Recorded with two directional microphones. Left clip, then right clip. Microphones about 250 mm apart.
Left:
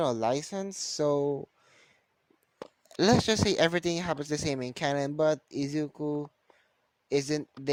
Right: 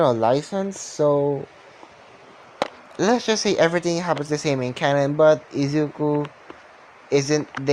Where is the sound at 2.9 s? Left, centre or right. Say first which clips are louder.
Right 4 dB; left.